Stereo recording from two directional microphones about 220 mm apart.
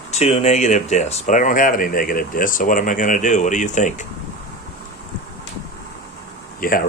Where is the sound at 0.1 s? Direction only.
30° left (ahead or behind).